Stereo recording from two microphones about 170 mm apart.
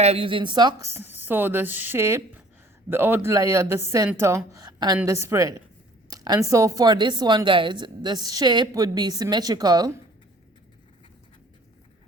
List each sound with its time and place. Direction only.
0.0 s a woman's voice: 35° right (ahead or behind)